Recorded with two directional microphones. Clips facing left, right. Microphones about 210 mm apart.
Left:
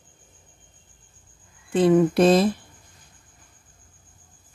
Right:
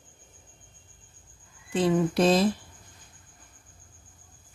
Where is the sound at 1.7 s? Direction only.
55° left (ahead or behind).